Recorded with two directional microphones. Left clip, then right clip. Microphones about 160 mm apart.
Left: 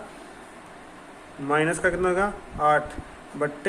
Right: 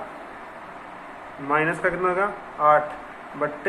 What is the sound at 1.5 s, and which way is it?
A man's voice, 70° left (ahead or behind).